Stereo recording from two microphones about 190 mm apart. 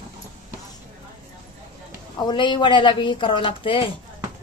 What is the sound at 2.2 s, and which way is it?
Speech, 25° left (ahead or behind).